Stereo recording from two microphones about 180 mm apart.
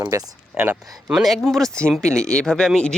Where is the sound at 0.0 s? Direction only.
20° right (ahead or behind).